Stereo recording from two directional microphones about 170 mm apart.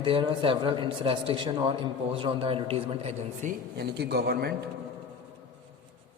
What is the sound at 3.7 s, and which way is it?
Speech, 75° right (ahead or behind).